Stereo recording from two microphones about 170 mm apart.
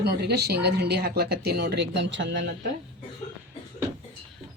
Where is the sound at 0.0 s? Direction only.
75° right (ahead or behind); by 2.4 s 90° right.